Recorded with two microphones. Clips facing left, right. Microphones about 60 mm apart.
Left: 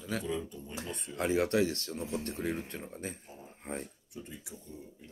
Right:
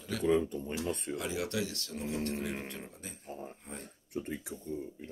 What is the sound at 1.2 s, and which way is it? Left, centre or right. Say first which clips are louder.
Speech: left 12 dB; left.